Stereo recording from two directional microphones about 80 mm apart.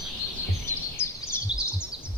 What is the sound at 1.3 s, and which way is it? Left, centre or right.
Bird, left.